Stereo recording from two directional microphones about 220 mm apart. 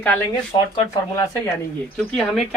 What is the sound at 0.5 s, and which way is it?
Speech, 20° left (ahead or behind).